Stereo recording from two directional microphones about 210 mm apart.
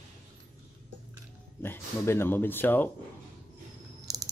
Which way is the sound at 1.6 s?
10° left (ahead or behind).